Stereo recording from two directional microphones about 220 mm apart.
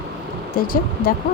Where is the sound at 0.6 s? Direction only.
40° left (ahead or behind).